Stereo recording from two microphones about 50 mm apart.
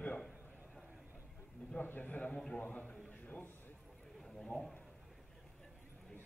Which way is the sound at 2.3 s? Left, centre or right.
Centre.